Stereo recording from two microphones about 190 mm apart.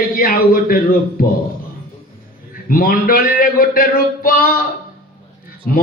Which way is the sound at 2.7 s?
50° left (ahead or behind).